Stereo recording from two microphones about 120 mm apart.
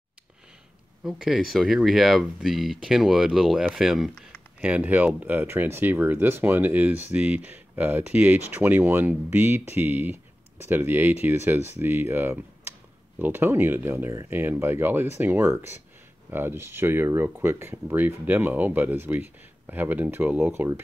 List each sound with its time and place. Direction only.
1.0 s speech: centre (ahead or behind); by 20.8 s 20° right (ahead or behind)